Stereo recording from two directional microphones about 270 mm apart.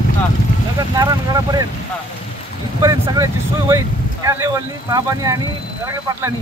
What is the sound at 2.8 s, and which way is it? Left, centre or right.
Speech, centre.